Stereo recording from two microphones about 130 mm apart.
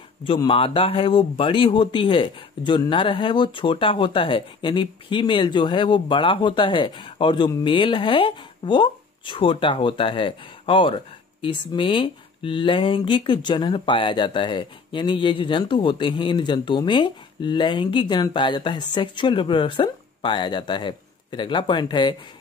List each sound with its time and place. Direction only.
0.5 s speech: 45° left (ahead or behind)